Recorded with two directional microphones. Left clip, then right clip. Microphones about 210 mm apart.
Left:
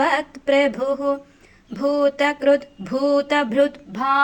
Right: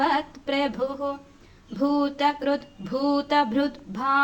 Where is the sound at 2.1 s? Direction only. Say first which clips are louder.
Left 6 dB; 30° left (ahead or behind).